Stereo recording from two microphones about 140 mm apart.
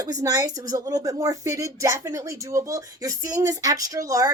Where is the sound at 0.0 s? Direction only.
25° right (ahead or behind).